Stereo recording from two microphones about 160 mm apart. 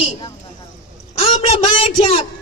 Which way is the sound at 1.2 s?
40° left (ahead or behind).